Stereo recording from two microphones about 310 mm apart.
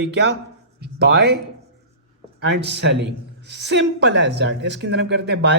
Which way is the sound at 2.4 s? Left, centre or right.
Right.